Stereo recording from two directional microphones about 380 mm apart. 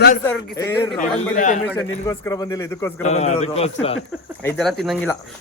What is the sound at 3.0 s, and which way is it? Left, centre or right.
Speech, centre.